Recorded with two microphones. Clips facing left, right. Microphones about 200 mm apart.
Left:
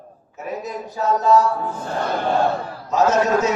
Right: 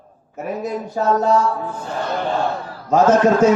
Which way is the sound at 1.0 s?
50° right (ahead or behind).